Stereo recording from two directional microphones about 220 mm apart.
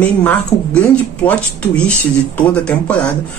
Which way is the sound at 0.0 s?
5° left (ahead or behind).